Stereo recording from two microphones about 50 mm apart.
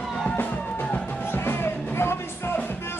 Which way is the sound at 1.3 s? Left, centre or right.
Left.